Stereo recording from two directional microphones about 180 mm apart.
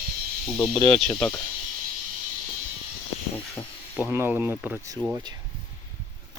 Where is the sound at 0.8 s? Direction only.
30° left (ahead or behind).